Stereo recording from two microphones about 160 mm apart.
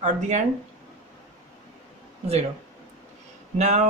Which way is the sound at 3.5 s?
45° right (ahead or behind).